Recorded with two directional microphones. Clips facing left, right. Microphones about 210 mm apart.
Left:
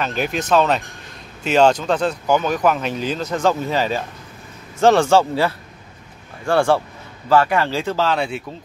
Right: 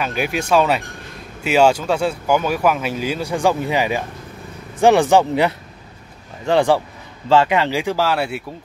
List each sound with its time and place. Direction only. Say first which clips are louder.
0.0 s speech: right 1 dB; 10° right (ahead or behind)